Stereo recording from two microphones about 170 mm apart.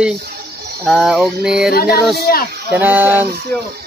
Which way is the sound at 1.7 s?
65° left (ahead or behind).